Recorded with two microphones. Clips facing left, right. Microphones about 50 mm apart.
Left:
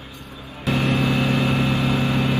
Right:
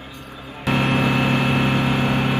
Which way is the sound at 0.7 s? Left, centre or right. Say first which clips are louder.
Right 2 dB; right.